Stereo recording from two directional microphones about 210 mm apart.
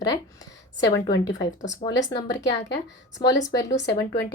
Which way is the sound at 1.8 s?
30° left (ahead or behind).